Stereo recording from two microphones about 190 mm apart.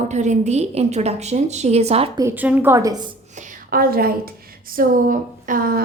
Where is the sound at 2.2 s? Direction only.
10° right (ahead or behind).